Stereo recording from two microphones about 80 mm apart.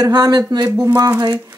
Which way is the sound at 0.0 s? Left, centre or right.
Right.